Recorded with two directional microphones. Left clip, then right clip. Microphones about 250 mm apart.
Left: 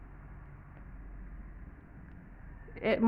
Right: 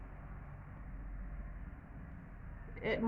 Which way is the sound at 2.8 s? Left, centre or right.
Left.